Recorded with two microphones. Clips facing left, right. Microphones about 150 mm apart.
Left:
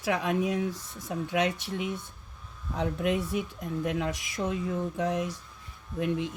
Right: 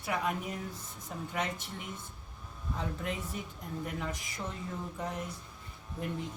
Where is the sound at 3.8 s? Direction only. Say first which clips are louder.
Left 8 dB; 90° left.